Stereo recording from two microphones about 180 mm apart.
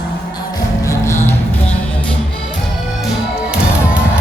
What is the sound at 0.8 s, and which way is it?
Music, 15° left (ahead or behind).